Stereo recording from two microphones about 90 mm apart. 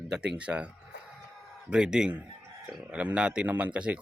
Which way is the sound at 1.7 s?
10° right (ahead or behind).